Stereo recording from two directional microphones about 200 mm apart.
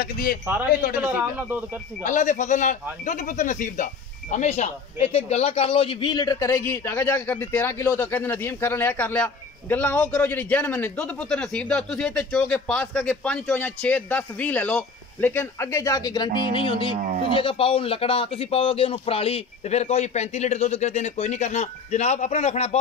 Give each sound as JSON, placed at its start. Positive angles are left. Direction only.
{"t": 0.0, "sound": "speech", "side_deg": 45}
{"t": 0.9, "sound": "speech", "side_deg": -10}
{"t": 2.0, "sound": "speech", "side_deg": 40}